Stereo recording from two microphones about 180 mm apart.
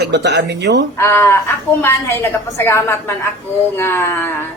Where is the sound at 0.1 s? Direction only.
70° right (ahead or behind).